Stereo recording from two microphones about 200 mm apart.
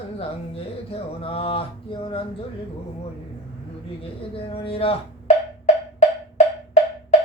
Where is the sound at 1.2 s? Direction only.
25° left (ahead or behind).